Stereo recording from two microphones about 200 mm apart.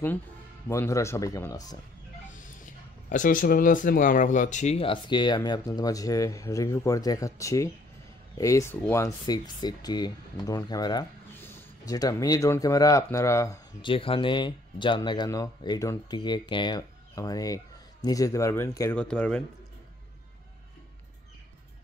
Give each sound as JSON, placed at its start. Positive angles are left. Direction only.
{"t": 0.7, "sound": "speech", "side_deg": 15}
{"t": 2.2, "sound": "speech", "side_deg": 40}